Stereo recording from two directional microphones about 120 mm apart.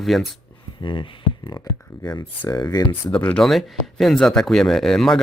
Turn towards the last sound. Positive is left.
turn(degrees=5)  # may be behind; listen again after turning